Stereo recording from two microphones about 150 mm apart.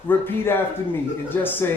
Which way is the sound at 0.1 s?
15° left (ahead or behind).